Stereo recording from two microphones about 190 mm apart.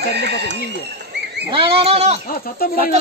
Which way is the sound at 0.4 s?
65° right (ahead or behind).